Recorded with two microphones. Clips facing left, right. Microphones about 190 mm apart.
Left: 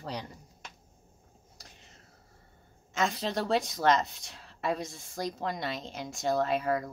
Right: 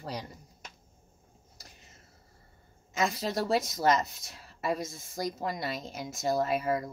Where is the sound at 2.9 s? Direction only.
Centre (ahead or behind).